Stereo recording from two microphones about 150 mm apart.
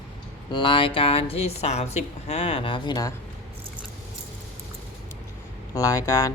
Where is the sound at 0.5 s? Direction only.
35° left (ahead or behind).